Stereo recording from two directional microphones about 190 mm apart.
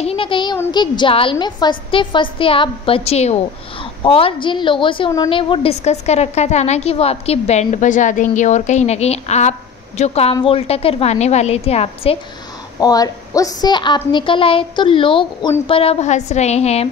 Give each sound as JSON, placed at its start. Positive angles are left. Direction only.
{"t": 0.0, "sound": "a sound", "side_deg": 30}
{"t": 0.7, "sound": "a woman's voice", "side_deg": 25}
{"t": 12.8, "sound": "a woman's voice", "side_deg": 20}